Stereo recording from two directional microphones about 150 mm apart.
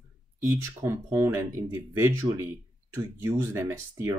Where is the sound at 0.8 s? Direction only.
20° right (ahead or behind).